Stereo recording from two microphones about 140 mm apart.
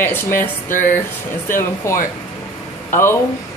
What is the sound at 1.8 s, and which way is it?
Speech, 20° left (ahead or behind).